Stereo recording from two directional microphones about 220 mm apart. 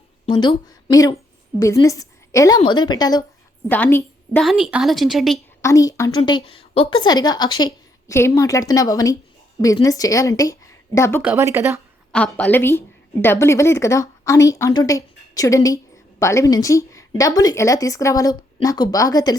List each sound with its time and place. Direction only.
0.3 s a woman's voice: 20° left (ahead or behind)
4.4 s speech: 5° right (ahead or behind)
5.6 s a woman's voice: 15° left (ahead or behind)
7.6 s a sound: 15° left (ahead or behind)
8.4 s speech: 15° left (ahead or behind)
11.2 s speech: 10° right (ahead or behind)
12.1 s speech: 5° left (ahead or behind)